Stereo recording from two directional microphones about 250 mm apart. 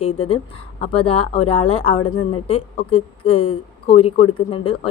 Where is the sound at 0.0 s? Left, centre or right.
Left.